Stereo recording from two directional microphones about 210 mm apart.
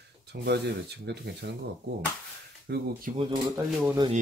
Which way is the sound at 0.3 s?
50° right (ahead or behind).